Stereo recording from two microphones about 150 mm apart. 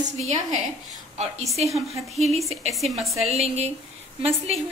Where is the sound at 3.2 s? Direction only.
45° right (ahead or behind).